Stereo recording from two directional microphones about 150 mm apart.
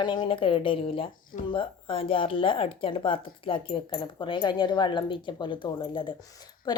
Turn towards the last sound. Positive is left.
turn(degrees=30)  # may be behind; listen again after turning